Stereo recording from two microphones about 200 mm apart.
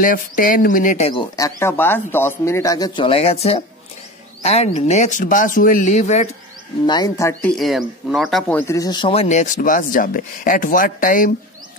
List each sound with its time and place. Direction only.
0.0 s a man's voice: 45° left (ahead or behind)
6.9 s speech: 15° left (ahead or behind)
7.5 s a man's voice: centre (ahead or behind); by 11.3 s 45° left (ahead or behind)